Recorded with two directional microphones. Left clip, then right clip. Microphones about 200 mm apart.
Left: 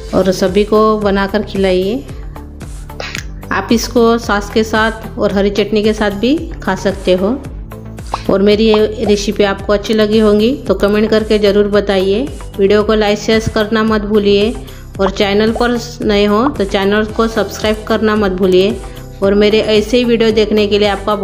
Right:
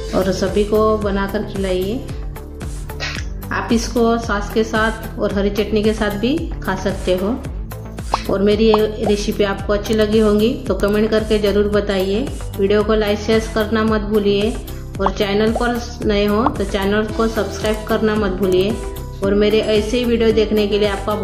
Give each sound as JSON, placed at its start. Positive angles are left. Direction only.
{"t": 0.1, "sound": "a woman's voice", "side_deg": 40}
{"t": 3.4, "sound": "a woman's voice", "side_deg": 40}
{"t": 8.3, "sound": "a woman's voice", "side_deg": 40}